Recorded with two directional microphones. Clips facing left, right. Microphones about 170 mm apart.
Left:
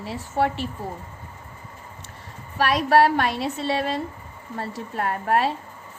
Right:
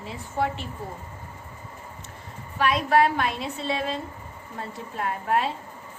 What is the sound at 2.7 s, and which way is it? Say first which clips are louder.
A woman's voice: left 3 dB; 65° left (ahead or behind).